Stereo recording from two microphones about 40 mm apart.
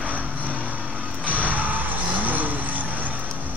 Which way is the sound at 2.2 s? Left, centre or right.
Right.